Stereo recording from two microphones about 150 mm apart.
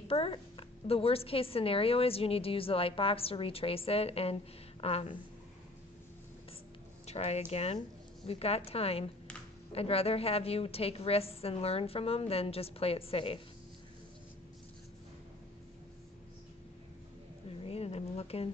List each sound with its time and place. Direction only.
0.1 s a woman's voice: 35° left (ahead or behind)
7.1 s a woman's voice: 45° left (ahead or behind)
17.6 s a sound: 40° left (ahead or behind)